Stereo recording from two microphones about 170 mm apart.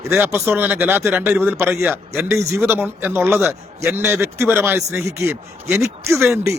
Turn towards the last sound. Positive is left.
turn(degrees=-15)  # may be behind; listen again after turning